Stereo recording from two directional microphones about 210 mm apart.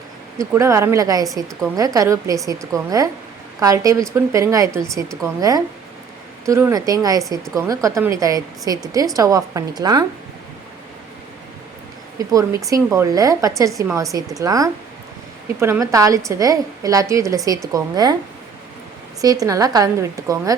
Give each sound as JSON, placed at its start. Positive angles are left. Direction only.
{"t": 0.3, "sound": "a woman's voice", "side_deg": -15}
{"t": 12.3, "sound": "a woman's voice", "side_deg": -15}
{"t": 19.2, "sound": "a woman's voice", "side_deg": -15}